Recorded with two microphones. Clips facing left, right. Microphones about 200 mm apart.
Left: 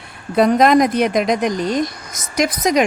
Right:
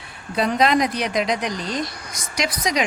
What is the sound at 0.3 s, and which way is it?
A woman's voice, 50° left (ahead or behind).